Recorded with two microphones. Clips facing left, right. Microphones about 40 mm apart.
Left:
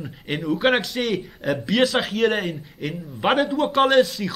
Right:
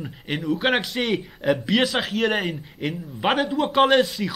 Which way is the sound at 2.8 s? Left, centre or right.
Centre.